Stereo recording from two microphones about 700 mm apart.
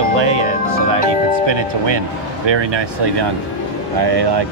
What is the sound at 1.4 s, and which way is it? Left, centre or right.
Speech, right.